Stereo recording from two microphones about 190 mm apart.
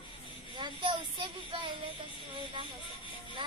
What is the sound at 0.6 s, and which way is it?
Speech, 25° right (ahead or behind).